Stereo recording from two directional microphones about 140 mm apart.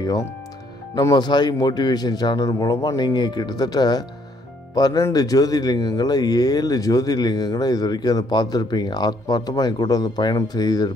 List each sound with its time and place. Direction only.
0.9 s speech: 30° left (ahead or behind)